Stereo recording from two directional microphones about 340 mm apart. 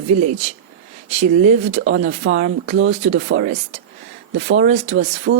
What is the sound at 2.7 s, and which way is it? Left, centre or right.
Speech, right.